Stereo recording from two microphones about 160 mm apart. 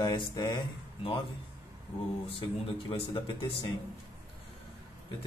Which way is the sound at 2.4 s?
30° left (ahead or behind).